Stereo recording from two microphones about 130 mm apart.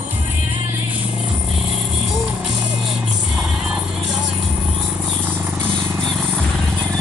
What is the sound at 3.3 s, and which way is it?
Music, 5° right (ahead or behind).